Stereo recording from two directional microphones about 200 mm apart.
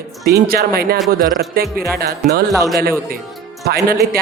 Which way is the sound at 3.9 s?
50° right (ahead or behind).